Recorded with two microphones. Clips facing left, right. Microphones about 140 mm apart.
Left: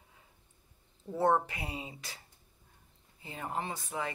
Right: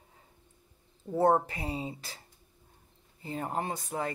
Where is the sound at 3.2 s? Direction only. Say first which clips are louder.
Right 4 dB; 40° right (ahead or behind).